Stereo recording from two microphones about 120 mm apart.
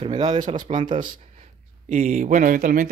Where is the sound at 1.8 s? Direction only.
80° right.